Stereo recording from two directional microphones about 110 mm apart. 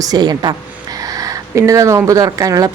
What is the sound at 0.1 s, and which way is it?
Speech, 40° right (ahead or behind).